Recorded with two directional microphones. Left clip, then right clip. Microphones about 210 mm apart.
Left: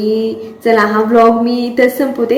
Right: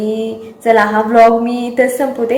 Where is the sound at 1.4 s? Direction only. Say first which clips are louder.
Left 1 dB; 5° right (ahead or behind).